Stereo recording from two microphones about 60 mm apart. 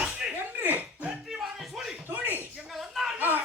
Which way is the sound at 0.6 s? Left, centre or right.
Right.